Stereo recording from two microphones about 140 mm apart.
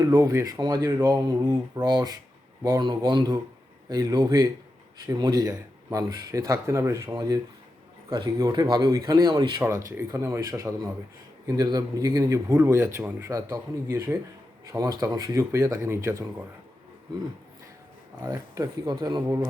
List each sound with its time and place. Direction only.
0.0 s speech: 20° right (ahead or behind)
9.6 s speech: 20° right (ahead or behind)
18.2 s speech: 25° right (ahead or behind)